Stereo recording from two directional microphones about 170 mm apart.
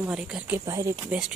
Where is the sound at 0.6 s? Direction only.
20° right (ahead or behind).